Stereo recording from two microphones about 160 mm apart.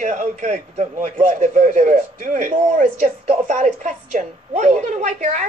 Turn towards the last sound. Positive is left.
turn(degrees=-50)  # may be behind; listen again after turning